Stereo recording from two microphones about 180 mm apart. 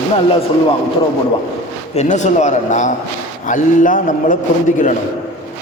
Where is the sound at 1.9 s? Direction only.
40° left (ahead or behind).